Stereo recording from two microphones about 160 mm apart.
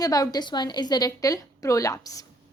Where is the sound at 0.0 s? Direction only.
25° left (ahead or behind).